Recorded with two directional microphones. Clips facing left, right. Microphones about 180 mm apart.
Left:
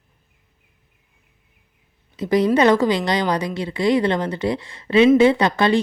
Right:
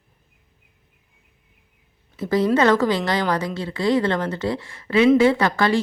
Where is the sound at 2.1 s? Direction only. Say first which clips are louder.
Left 2 dB; 15° left (ahead or behind).